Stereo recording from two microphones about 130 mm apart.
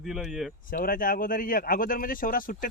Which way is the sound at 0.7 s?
90° left.